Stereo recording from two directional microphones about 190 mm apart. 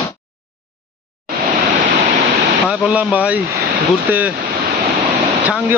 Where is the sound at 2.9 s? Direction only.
5° right (ahead or behind).